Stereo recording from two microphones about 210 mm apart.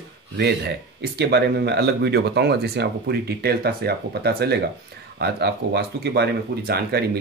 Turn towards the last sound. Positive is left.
turn(degrees=-50)  # may be behind; listen again after turning